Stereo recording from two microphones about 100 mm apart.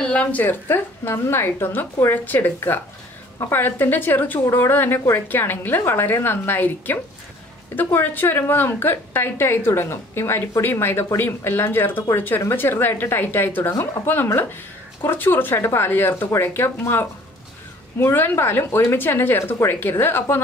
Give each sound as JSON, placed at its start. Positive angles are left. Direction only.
{"t": 0.0, "sound": "a woman's voice", "side_deg": 15}